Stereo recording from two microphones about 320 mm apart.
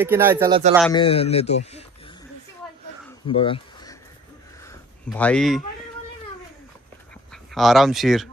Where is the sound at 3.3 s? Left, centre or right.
Centre.